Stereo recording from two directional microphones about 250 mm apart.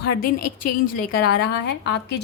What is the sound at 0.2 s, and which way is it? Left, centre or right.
Speech, left.